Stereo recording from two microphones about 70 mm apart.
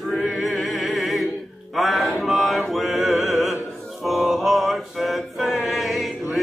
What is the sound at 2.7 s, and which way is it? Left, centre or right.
Opera, centre.